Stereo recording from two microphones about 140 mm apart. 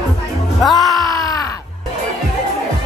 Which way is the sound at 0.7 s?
25° left (ahead or behind).